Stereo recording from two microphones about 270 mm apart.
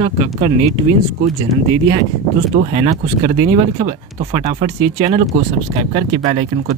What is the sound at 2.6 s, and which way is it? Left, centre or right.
Speech, right.